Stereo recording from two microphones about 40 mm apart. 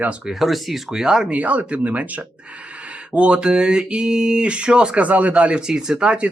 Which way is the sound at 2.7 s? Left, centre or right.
Right.